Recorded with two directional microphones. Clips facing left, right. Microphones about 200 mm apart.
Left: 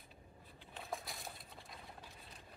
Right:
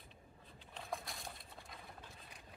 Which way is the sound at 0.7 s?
Centre (ahead or behind).